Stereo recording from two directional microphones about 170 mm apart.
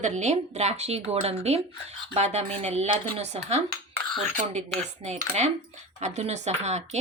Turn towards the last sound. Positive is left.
turn(degrees=-40)  # may be behind; listen again after turning